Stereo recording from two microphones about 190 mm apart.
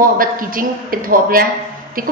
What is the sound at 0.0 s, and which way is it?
A woman's voice, 45° right (ahead or behind).